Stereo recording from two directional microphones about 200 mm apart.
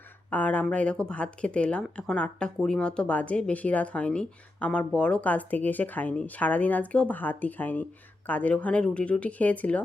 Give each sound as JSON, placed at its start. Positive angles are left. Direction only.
{"t": 0.3, "sound": "speech", "side_deg": 10}